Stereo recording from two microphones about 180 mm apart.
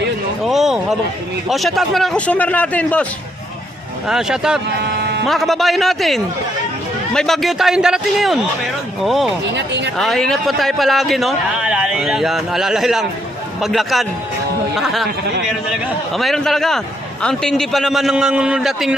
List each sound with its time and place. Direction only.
0.4 s a man's voice: centre (ahead or behind)
4.1 s a man's voice: 5° right (ahead or behind)
4.8 s a sound: 65° right (ahead or behind)
5.2 s a man's voice: centre (ahead or behind)
9.6 s speech: 75° right (ahead or behind)
10.0 s a man's voice: centre (ahead or behind)
16.1 s a man's voice: centre (ahead or behind)